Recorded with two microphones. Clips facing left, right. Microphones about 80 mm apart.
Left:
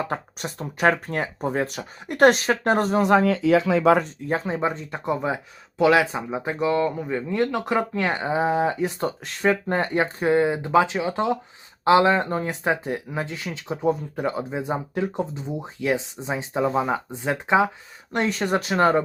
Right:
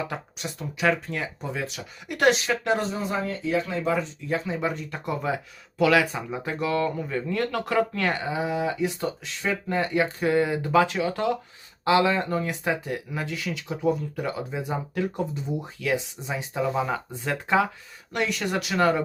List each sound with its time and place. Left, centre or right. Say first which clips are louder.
0.0 s speech: left 4 dB; left
3.0 s speech: left 10 dB; left
4.0 s speech: left 3 dB; left
18.1 s speech: left 4 dB; left